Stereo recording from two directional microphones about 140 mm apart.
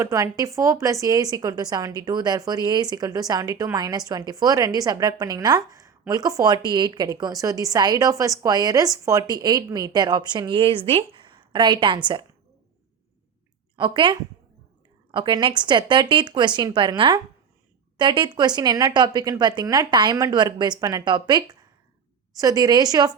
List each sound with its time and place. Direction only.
0.0 s a woman's voice: 25° right (ahead or behind)
13.7 s a woman's voice: 35° right (ahead or behind)